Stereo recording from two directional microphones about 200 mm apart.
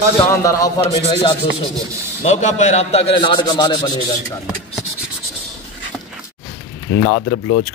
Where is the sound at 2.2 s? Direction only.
35° left (ahead or behind).